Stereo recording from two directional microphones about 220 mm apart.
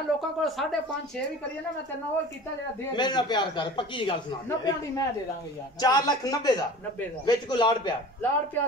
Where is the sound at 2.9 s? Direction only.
20° left (ahead or behind).